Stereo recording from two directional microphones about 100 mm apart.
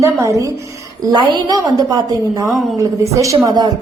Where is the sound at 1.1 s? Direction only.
50° right (ahead or behind); by 3.3 s 35° right (ahead or behind).